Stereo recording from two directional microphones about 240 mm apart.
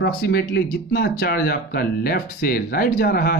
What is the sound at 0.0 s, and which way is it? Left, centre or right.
Speech, left.